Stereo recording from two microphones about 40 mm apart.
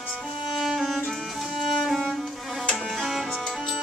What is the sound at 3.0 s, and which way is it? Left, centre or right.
Music, centre.